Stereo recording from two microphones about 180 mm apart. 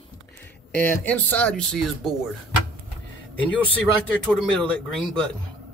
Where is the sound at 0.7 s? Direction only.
10° left (ahead or behind).